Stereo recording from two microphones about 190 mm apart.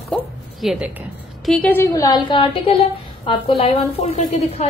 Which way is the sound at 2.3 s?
30° left (ahead or behind).